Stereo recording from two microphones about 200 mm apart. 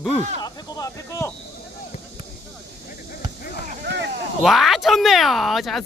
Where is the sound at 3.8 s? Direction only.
60° right (ahead or behind).